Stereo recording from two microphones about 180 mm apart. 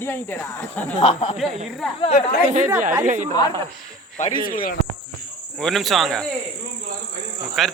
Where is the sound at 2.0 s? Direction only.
35° left (ahead or behind).